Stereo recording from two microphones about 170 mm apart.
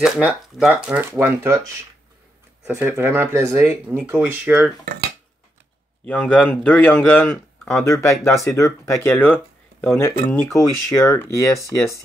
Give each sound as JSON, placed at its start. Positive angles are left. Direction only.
{"t": 0.0, "sound": "speech", "side_deg": -5}
{"t": 2.6, "sound": "speech", "side_deg": -10}
{"t": 6.0, "sound": "a man's voice", "side_deg": 10}